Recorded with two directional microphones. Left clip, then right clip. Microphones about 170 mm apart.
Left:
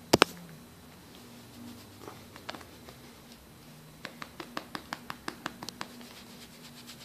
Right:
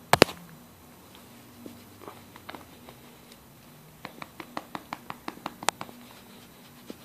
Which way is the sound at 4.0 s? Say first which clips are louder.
Right 1 dB; 20° right (ahead or behind).